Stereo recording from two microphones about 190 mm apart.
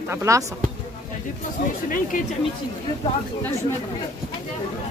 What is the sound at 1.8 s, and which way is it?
Speech, 45° left (ahead or behind).